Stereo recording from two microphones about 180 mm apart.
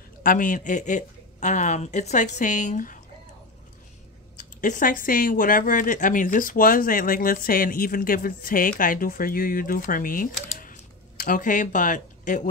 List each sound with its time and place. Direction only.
0.2 s speech: 50° left (ahead or behind)
4.4 s speech: 45° left (ahead or behind)
10.5 s typing: 45° left (ahead or behind)
11.2 s speech: 45° left (ahead or behind)